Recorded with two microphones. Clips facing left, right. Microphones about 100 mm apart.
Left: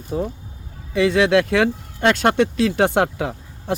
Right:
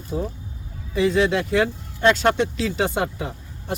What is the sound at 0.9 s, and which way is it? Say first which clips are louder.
Speech: left 3 dB; 70° left (ahead or behind).